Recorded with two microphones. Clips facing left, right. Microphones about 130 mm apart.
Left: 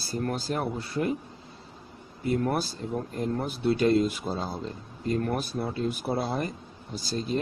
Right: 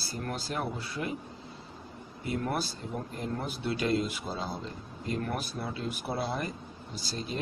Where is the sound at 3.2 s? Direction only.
40° left (ahead or behind).